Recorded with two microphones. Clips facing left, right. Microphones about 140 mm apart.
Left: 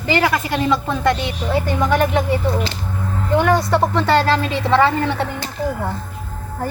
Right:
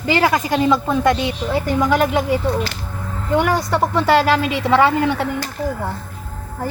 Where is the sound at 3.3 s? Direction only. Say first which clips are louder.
Left 2 dB; centre (ahead or behind).